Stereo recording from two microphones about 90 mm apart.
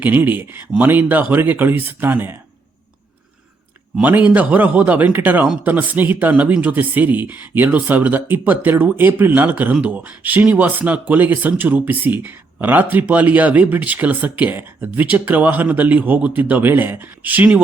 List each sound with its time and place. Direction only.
0.0 s speech: 20° right (ahead or behind)
4.0 s speech: 20° right (ahead or behind)